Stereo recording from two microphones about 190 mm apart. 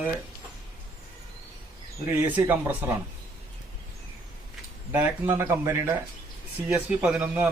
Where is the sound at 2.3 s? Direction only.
10° right (ahead or behind).